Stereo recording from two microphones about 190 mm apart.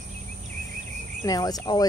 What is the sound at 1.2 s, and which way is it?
Speech, 20° left (ahead or behind).